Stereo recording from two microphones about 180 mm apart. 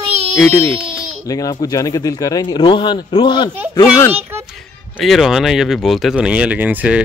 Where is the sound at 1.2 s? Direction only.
20° left (ahead or behind).